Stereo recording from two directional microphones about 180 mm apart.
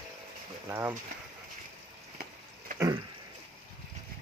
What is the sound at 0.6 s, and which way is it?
Speech, 15° right (ahead or behind).